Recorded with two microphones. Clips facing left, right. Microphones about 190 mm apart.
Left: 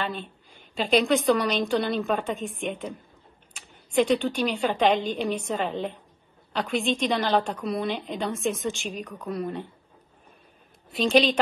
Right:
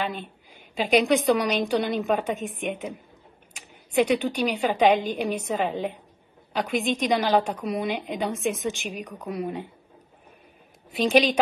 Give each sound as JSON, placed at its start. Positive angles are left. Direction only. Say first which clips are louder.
{"t": 0.0, "sound": "a woman's voice", "louder": "right 1 dB", "side_deg": -10}
{"t": 11.0, "sound": "a woman's voice", "louder": "right 1 dB", "side_deg": -10}